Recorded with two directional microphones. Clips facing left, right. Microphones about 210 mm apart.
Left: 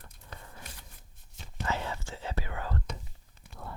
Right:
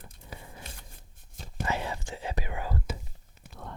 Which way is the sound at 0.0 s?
10° right (ahead or behind).